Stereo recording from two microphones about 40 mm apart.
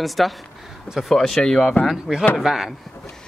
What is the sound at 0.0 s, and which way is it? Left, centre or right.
Speech, centre.